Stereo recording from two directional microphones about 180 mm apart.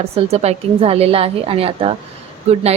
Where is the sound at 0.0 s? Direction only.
35° right (ahead or behind).